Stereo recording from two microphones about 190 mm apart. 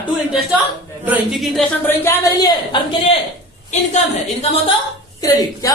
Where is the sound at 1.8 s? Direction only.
15° left (ahead or behind).